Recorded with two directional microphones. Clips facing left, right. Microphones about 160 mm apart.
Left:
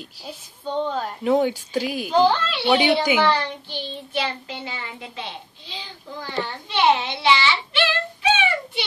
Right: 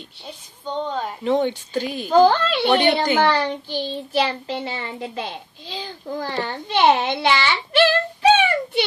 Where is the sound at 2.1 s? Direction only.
50° right (ahead or behind).